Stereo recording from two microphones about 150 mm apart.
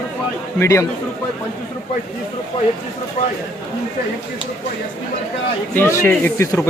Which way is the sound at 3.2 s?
50° left (ahead or behind).